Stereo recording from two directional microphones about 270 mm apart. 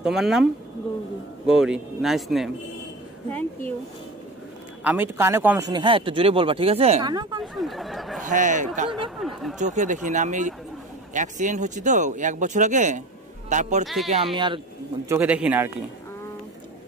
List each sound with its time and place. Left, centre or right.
0.0 s speech: centre
4.8 s speech: centre
7.5 s speech: centre
8.2 s speech: right
9.2 s speech: centre
9.6 s speech: right
13.8 s speech: centre
14.3 s speech: centre
15.0 s speech: centre